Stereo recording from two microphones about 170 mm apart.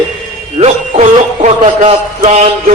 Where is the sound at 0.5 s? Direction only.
40° right (ahead or behind).